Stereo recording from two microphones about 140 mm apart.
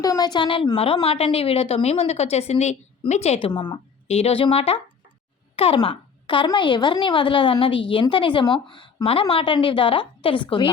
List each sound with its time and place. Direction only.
0.0 s a woman's voice: 30° left (ahead or behind); by 3.5 s 45° left (ahead or behind)
3.5 s a woman's voice: 30° left (ahead or behind)
4.1 s a woman's voice: 45° left (ahead or behind)